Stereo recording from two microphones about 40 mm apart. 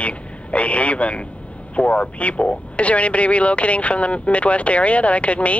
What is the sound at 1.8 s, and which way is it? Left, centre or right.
Speech, left.